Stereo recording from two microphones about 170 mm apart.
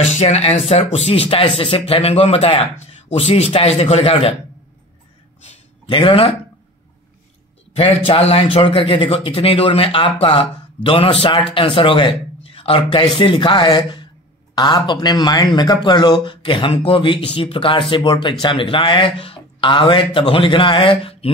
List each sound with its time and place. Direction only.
0.0 s a man's voice: 40° left (ahead or behind)
5.4 s a sound: 30° left (ahead or behind)
7.7 s a man's voice: 35° left (ahead or behind)